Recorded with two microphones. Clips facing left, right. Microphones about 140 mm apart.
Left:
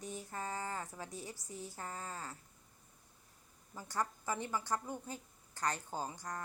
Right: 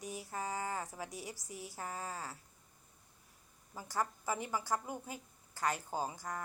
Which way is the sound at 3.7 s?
10° right (ahead or behind).